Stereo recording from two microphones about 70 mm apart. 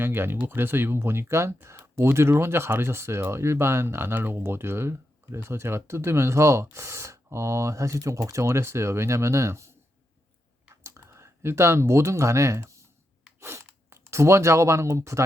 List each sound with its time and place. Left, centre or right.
0.0 s speech: right
10.8 s speech: right
13.4 s zipper: right